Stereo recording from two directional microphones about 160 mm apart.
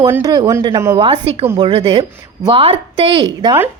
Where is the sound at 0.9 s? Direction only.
35° right (ahead or behind).